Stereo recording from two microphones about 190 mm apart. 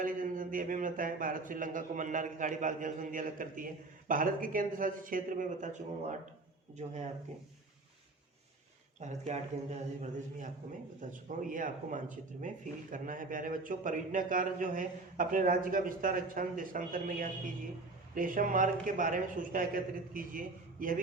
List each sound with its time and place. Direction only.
0.0 s a man's voice: 45° right (ahead or behind)
9.0 s a man's voice: 40° right (ahead or behind)